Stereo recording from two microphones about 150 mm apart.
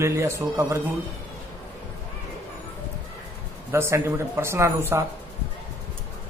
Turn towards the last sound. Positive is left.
turn(degrees=-20)  # may be behind; listen again after turning